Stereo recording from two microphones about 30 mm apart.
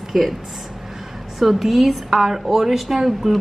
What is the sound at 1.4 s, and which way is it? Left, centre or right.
Speech, centre.